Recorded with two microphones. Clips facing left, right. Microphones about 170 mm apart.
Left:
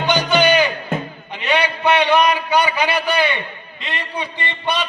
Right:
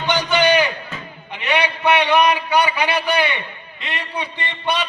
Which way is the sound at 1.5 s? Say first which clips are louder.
Left 1 dB; 15° right (ahead or behind).